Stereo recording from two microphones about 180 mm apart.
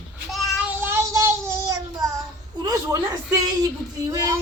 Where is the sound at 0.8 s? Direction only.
15° right (ahead or behind).